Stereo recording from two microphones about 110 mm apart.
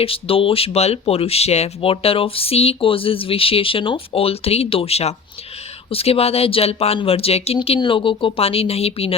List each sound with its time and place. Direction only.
0.0 s speech: 60° left (ahead or behind)
7.8 s speech: 50° left (ahead or behind)